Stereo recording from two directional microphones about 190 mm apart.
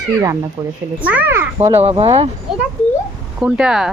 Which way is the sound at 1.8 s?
30° right (ahead or behind).